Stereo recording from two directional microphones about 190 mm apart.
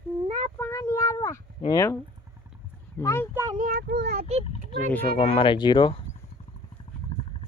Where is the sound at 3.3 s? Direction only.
15° right (ahead or behind).